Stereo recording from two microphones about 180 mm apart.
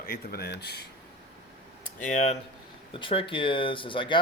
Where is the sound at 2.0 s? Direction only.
40° left (ahead or behind).